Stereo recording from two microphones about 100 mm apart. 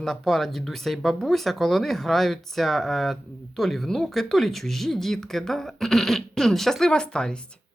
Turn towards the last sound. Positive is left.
turn(degrees=10)  # may be behind; listen again after turning